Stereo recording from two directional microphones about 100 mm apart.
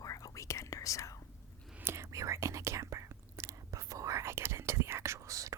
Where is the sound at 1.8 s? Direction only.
25° right (ahead or behind).